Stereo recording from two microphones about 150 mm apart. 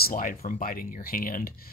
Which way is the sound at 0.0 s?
65° left (ahead or behind).